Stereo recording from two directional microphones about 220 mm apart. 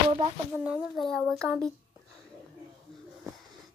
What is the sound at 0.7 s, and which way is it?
Speech, centre (ahead or behind).